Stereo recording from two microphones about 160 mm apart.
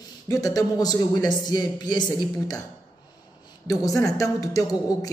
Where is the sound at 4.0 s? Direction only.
20° left (ahead or behind).